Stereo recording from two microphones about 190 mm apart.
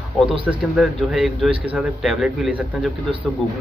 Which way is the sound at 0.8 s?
Centre (ahead or behind).